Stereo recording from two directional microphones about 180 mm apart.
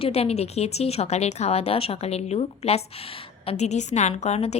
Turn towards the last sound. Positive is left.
turn(degrees=35)  # may be behind; listen again after turning